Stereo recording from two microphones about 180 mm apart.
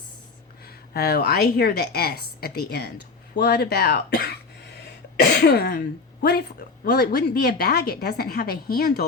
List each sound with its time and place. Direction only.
0.9 s a woman's voice: 60° left (ahead or behind)
5.4 s throat clearing: 60° left (ahead or behind)
6.8 s a woman's voice: 60° left (ahead or behind)